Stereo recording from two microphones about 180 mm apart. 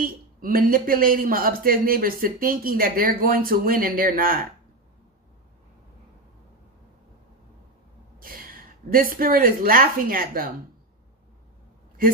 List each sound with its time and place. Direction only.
0.0 s speech: 50° right (ahead or behind)
8.2 s a woman's voice: 55° right (ahead or behind)